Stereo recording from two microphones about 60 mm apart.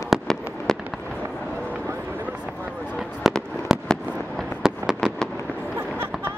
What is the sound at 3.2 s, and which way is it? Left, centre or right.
Fireworks, centre.